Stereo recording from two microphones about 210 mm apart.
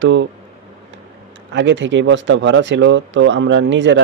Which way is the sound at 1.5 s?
60° right (ahead or behind).